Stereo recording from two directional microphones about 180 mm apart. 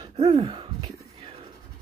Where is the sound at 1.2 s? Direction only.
30° right (ahead or behind).